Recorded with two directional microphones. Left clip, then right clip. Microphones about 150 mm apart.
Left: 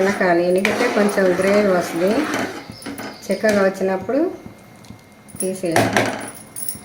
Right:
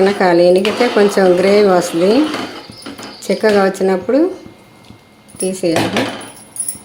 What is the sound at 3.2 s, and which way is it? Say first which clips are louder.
Speech: right 5 dB; 50° right (ahead or behind).